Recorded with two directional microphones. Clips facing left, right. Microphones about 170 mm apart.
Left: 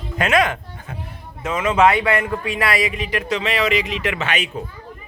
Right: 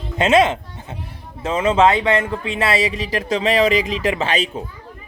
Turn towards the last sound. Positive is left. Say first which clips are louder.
# right 3 dB
turn(degrees=-30)  # may be behind; listen again after turning